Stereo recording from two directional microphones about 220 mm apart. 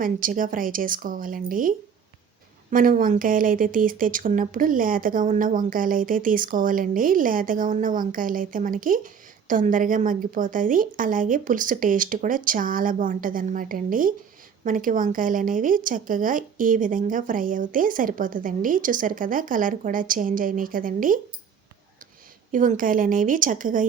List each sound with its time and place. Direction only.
0.0 s speech: 40° right (ahead or behind)
22.5 s speech: 40° right (ahead or behind)